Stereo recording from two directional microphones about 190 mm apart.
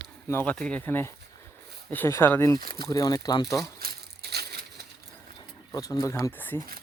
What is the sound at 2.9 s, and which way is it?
Speech, 20° left (ahead or behind).